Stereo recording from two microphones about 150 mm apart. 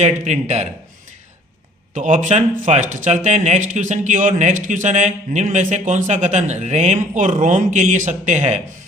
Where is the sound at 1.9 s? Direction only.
55° right (ahead or behind).